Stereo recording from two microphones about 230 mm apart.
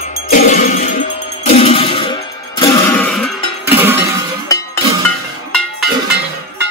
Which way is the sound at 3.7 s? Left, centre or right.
Centre.